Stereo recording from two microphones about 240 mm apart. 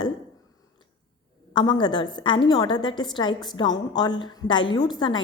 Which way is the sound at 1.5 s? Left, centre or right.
Centre.